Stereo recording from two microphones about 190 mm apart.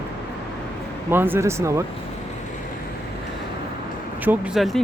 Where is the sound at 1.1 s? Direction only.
10° right (ahead or behind).